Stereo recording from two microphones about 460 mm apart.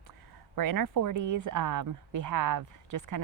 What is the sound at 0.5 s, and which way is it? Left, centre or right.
Speech, right.